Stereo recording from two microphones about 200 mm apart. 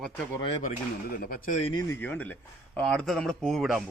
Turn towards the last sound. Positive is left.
turn(degrees=0)  # may be behind; listen again after turning